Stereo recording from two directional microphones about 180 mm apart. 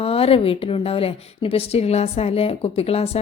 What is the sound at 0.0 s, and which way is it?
A woman's voice, 35° left (ahead or behind).